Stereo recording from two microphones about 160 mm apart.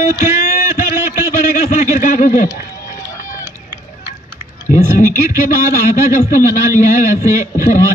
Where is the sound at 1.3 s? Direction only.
50° left (ahead or behind).